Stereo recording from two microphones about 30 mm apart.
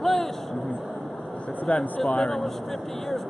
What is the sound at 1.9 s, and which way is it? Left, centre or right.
Speech, left.